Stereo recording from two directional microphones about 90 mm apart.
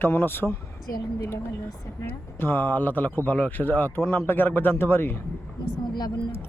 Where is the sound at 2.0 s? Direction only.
25° left (ahead or behind).